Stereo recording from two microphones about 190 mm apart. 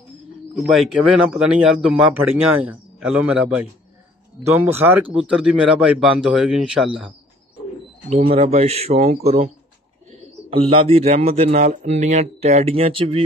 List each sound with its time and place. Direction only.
0.6 s a man's voice: centre (ahead or behind)
8.1 s speech: 35° right (ahead or behind)
10.5 s speech: 30° right (ahead or behind)